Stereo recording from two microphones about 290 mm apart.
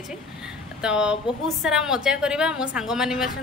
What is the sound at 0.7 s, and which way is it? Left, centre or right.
A woman's voice, centre.